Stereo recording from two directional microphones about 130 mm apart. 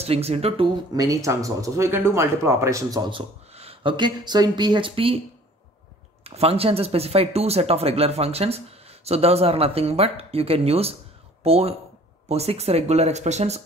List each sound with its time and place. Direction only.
0.0 s speech: 50° right (ahead or behind)
0.9 s speech: 25° right (ahead or behind); by 5.2 s 45° right (ahead or behind)
6.2 s speech: 50° right (ahead or behind)